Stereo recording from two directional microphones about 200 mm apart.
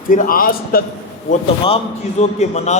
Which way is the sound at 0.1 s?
45° left (ahead or behind).